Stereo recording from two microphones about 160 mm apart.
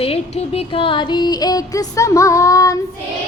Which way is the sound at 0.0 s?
40° left (ahead or behind).